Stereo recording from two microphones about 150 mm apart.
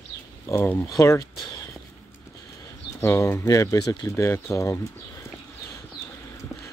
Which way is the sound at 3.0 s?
20° left (ahead or behind).